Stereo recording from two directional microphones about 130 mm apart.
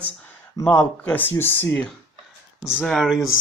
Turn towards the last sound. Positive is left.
turn(degrees=0)  # may be behind; listen again after turning